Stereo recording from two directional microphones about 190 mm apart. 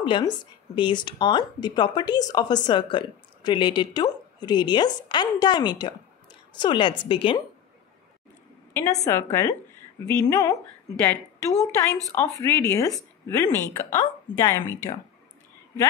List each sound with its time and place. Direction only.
0.0 s speech: 25° left (ahead or behind)
8.7 s a woman's voice: 20° left (ahead or behind)
12.2 s a woman's voice: 15° left (ahead or behind)